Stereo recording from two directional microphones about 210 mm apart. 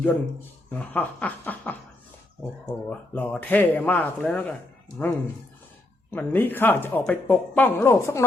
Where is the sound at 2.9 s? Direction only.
10° left (ahead or behind).